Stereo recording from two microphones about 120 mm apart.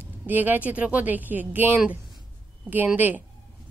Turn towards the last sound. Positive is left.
turn(degrees=-15)  # may be behind; listen again after turning